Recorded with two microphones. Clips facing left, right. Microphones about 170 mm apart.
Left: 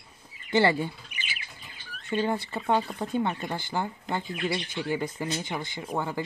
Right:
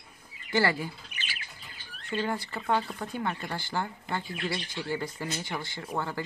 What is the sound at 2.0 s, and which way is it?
Speech, 20° left (ahead or behind).